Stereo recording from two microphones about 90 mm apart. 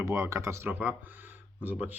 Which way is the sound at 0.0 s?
35° right (ahead or behind).